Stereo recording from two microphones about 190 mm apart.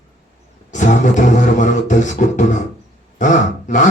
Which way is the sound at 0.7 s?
40° left (ahead or behind).